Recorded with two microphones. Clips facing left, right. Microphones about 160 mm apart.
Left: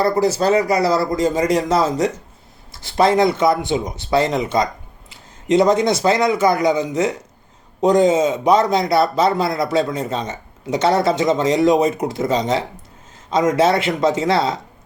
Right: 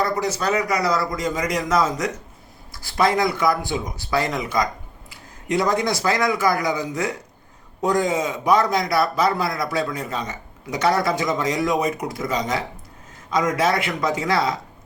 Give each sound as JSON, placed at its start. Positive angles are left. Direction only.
{"t": 0.0, "sound": "a man's voice", "side_deg": 30}